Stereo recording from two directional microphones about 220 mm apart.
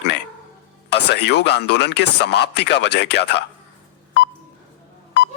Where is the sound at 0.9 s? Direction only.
50° left (ahead or behind).